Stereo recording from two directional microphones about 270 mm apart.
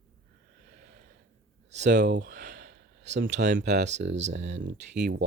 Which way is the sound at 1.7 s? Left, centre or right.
Right.